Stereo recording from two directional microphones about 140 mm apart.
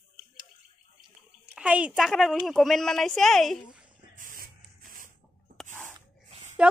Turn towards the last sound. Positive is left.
turn(degrees=-10)  # may be behind; listen again after turning